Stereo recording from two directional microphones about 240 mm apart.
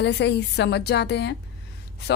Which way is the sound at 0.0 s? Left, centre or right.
Left.